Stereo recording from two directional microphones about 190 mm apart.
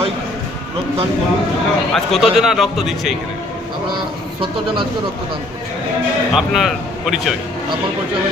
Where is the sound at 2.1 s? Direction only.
Centre (ahead or behind).